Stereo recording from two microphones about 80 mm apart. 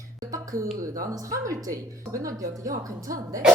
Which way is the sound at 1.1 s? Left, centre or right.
Right.